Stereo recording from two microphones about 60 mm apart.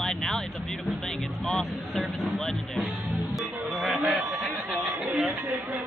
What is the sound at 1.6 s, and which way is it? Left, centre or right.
Speech, centre.